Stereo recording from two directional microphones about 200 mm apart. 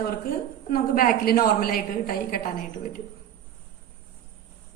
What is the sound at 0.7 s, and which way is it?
A woman's voice, 45° left (ahead or behind).